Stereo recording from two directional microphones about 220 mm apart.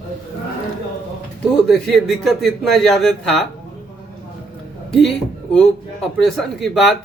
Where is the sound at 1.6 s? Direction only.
Centre (ahead or behind).